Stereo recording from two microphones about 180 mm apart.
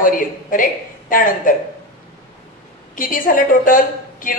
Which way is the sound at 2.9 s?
50° left (ahead or behind).